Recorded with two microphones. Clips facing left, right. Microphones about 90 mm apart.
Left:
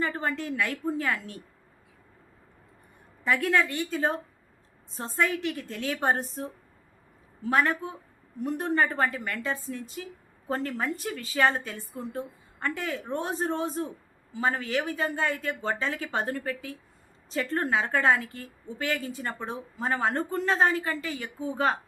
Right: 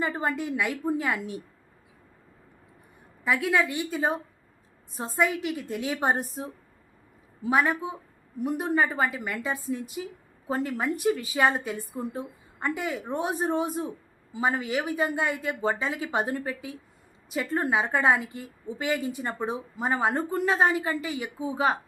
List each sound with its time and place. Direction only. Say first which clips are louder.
0.0 s a woman's voice: right 2 dB; 15° right (ahead or behind)
3.2 s a woman's voice: even; 5° right (ahead or behind)